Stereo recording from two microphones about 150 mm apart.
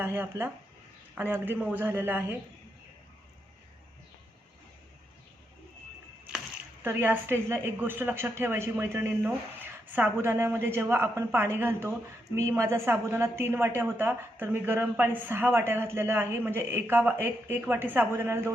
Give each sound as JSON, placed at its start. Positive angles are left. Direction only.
{"t": 0.0, "sound": "a woman's voice", "side_deg": -15}
{"t": 6.8, "sound": "a woman's voice", "side_deg": -10}